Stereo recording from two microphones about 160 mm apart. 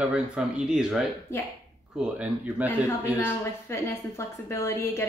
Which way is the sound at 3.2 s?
15° left (ahead or behind).